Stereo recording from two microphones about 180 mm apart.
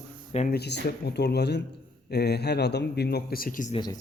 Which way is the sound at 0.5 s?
65° left (ahead or behind).